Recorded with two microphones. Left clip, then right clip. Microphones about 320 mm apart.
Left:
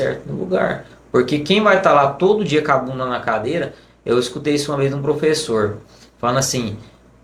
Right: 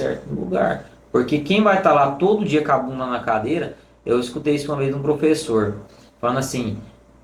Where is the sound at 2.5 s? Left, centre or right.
Left.